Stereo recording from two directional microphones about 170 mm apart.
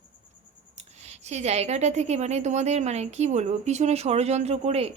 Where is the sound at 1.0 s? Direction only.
40° right (ahead or behind).